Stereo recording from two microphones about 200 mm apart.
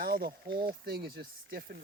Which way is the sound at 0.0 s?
50° right (ahead or behind).